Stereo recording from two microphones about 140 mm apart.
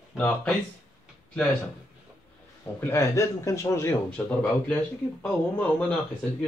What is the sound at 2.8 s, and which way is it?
A man's voice, 20° left (ahead or behind).